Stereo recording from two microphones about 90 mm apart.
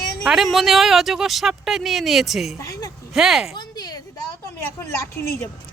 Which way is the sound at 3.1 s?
5° right (ahead or behind).